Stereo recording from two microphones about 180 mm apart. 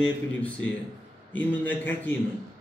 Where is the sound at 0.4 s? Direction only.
5° left (ahead or behind).